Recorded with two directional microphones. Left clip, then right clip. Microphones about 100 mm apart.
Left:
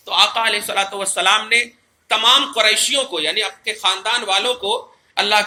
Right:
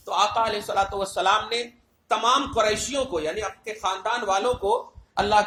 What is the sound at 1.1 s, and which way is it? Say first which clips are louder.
Speech: left 8 dB; 40° right (ahead or behind).